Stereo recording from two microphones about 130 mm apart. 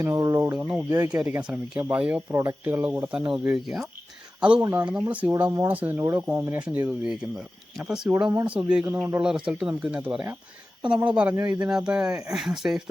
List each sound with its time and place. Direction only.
0.0 s speech: 25° right (ahead or behind)
5.3 s speech: 20° right (ahead or behind)
9.5 s speech: 5° right (ahead or behind)